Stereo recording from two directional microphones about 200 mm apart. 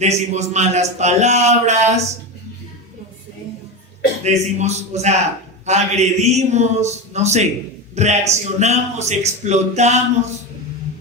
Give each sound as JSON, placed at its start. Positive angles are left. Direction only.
{"t": 0.0, "sound": "a man's voice", "side_deg": -35}
{"t": 4.2, "sound": "a man's voice", "side_deg": -35}